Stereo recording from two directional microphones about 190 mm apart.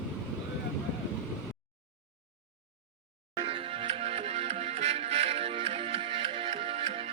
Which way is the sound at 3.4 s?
30° right (ahead or behind).